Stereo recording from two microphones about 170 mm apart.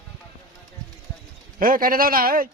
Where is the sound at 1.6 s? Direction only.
55° right (ahead or behind).